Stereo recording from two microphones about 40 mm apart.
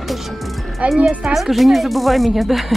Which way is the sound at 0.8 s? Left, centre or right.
Right.